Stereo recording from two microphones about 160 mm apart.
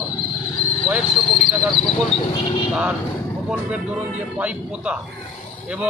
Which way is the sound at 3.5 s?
10° right (ahead or behind).